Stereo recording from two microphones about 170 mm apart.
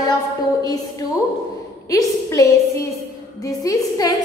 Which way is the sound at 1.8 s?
20° left (ahead or behind).